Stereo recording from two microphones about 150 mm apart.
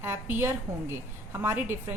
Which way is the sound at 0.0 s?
15° right (ahead or behind).